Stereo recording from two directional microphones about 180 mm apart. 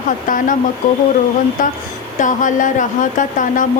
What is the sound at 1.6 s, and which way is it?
Speech, 45° left (ahead or behind).